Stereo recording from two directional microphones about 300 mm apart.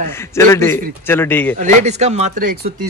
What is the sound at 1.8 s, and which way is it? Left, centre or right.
Speech, right.